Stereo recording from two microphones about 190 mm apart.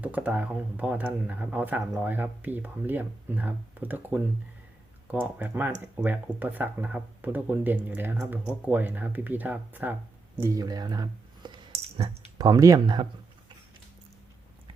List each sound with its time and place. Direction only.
0.0 s speech: 5° right (ahead or behind)
10.3 s a sound: 15° right (ahead or behind)
12.4 s speech: 20° right (ahead or behind)